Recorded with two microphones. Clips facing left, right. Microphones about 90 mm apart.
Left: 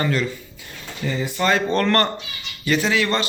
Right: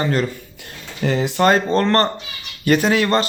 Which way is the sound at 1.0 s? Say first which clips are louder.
Right 6 dB; 80° right.